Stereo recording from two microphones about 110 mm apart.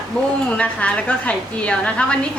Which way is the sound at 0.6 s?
10° left (ahead or behind).